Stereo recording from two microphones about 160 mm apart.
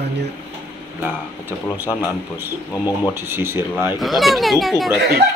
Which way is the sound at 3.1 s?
15° right (ahead or behind).